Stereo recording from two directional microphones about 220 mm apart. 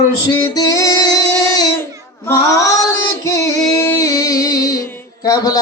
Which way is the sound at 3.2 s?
15° left (ahead or behind).